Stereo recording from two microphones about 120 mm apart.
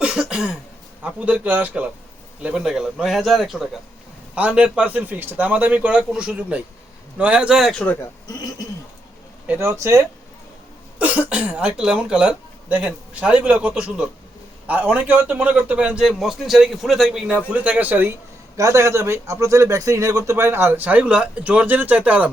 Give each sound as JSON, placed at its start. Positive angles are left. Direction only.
{"t": 0.0, "sound": "cough", "side_deg": -5}
{"t": 1.0, "sound": "a man's voice", "side_deg": -10}
{"t": 9.5, "sound": "speech", "side_deg": -20}
{"t": 10.9, "sound": "a man's voice", "side_deg": -10}
{"t": 18.5, "sound": "speech", "side_deg": -25}